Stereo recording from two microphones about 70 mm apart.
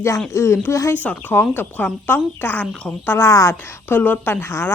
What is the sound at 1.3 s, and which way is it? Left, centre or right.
A woman's voice, left.